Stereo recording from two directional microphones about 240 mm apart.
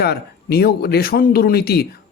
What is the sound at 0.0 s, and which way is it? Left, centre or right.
Speech, left.